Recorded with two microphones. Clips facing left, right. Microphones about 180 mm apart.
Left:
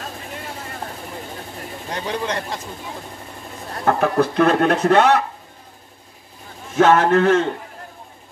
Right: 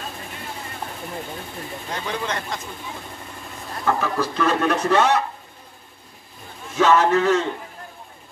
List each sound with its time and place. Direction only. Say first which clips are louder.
1.9 s speech: left 3 dB; 35° left (ahead or behind)
3.8 s speech: left 5 dB; 55° left (ahead or behind)
6.8 s a man's voice: left 3 dB; 55° left (ahead or behind)